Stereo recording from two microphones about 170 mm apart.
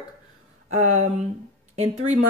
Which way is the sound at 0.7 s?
40° right (ahead or behind).